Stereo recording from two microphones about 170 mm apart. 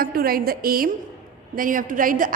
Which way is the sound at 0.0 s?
60° right (ahead or behind).